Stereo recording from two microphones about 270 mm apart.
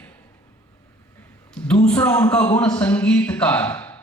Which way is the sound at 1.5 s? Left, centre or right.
Centre.